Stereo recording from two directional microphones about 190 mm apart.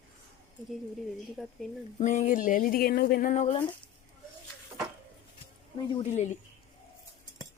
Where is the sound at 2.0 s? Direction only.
40° left (ahead or behind).